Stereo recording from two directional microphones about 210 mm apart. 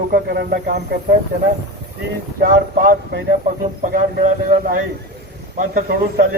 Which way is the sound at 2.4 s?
40° right (ahead or behind).